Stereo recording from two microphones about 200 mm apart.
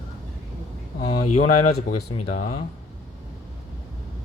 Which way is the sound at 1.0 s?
35° left (ahead or behind).